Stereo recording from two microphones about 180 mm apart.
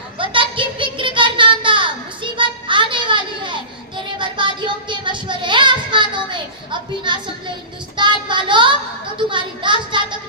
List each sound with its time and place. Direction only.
0.2 s a sound: 30° right (ahead or behind)
4.2 s child singing: 25° right (ahead or behind)
9.1 s speech: 25° right (ahead or behind)